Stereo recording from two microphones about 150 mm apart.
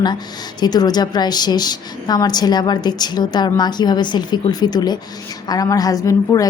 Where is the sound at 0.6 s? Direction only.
25° left (ahead or behind).